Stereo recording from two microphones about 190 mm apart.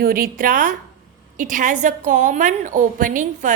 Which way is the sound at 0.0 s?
50° right (ahead or behind).